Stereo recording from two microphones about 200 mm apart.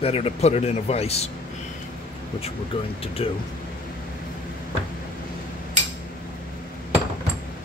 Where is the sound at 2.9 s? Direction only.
30° left (ahead or behind).